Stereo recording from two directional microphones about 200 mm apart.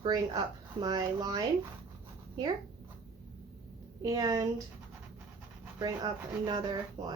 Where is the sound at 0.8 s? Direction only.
20° right (ahead or behind).